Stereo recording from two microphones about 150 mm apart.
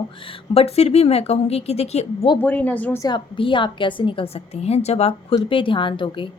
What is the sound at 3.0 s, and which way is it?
A woman's voice, 30° left (ahead or behind).